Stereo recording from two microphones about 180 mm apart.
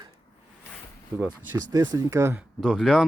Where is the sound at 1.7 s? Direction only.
20° right (ahead or behind).